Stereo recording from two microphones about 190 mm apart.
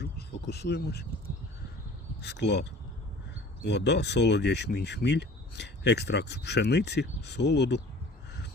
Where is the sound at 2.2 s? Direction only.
65° left (ahead or behind).